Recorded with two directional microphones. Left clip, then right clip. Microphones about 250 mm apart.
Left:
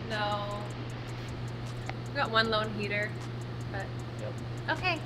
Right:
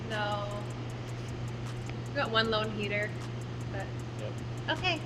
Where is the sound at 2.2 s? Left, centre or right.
Centre.